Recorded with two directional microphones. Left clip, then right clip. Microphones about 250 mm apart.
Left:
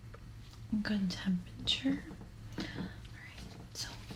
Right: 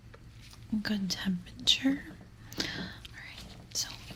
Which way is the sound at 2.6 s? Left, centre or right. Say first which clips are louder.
Right 7 dB; right.